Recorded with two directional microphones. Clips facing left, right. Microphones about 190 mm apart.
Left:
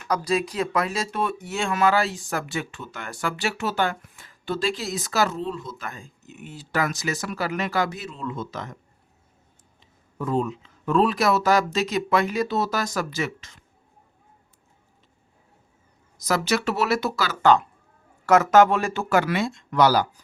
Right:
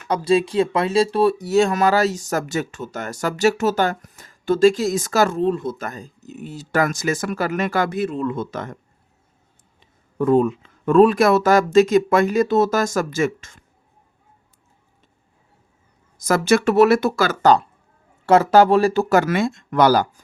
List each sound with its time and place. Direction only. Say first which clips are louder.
0.1 s speech: right 6 dB; 25° right (ahead or behind); by 8.8 s 55° right (ahead or behind)
9.8 s speech: right 10 dB; 55° right (ahead or behind)
16.2 s speech: right 7 dB; 50° right (ahead or behind)